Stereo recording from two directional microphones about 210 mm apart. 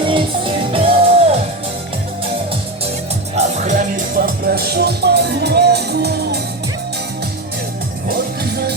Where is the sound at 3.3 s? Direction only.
35° right (ahead or behind).